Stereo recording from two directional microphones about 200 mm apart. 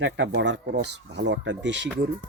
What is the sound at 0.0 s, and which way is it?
Speech, 60° right (ahead or behind).